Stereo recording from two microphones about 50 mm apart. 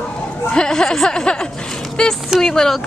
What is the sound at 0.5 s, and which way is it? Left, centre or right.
Speech, centre.